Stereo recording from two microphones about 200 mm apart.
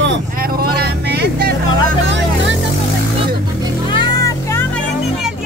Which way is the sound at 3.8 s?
20° left (ahead or behind).